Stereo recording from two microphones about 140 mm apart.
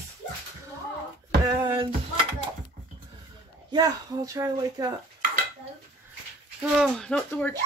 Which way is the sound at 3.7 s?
25° right (ahead or behind).